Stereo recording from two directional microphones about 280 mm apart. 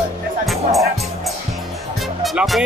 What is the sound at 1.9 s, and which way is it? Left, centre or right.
Music, centre.